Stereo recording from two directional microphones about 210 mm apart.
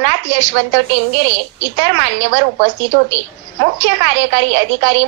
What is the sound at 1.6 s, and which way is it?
A woman's voice, 60° right (ahead or behind).